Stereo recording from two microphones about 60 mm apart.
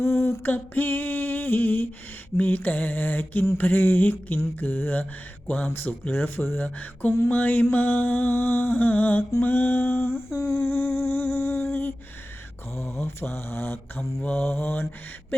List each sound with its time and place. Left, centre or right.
0.0 s humming: left